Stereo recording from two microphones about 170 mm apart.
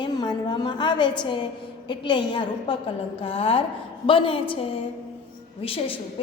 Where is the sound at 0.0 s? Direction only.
25° left (ahead or behind).